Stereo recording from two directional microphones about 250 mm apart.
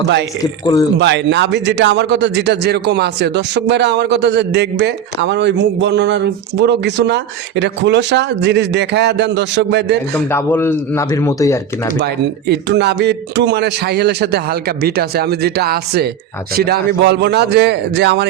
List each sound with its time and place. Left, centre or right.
0.6 s speech: centre
0.9 s a man's voice: right
10.2 s speech: centre
12.5 s a man's voice: right